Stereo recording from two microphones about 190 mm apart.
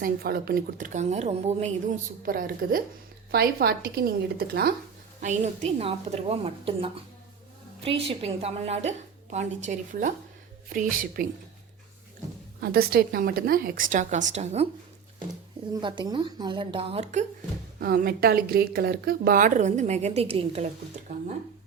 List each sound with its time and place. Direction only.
0.0 s a woman's voice: 50° right (ahead or behind); by 1.7 s 35° right (ahead or behind)
2.2 s speech: 50° right (ahead or behind)
5.2 s a woman's voice: 40° right (ahead or behind)
12.5 s speech: 55° right (ahead or behind); by 14.7 s 35° right (ahead or behind)
15.7 s speech: 25° right (ahead or behind)
17.7 s speech: 55° right (ahead or behind); by 20.7 s 30° right (ahead or behind)